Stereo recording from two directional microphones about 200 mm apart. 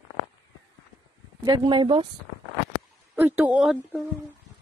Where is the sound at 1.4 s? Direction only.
20° right (ahead or behind).